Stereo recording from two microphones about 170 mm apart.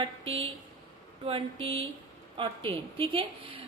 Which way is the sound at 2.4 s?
30° right (ahead or behind).